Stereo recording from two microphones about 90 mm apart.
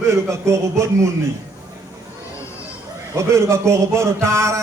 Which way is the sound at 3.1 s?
35° right (ahead or behind).